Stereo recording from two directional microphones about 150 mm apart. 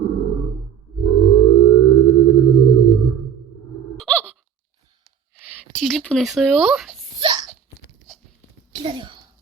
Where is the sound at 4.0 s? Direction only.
10° left (ahead or behind).